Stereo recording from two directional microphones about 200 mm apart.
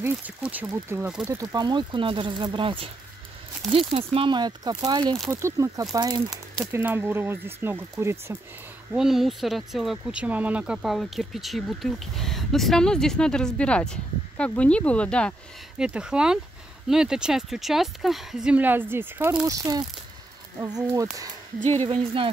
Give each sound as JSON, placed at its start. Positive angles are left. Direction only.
{"t": 0.0, "sound": "speech", "side_deg": -10}
{"t": 8.9, "sound": "speech", "side_deg": 0}